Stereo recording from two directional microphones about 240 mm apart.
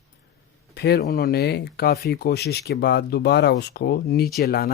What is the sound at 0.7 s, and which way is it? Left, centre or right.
Speech, left.